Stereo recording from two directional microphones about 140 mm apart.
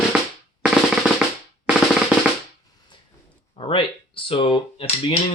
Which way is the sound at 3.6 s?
40° left (ahead or behind).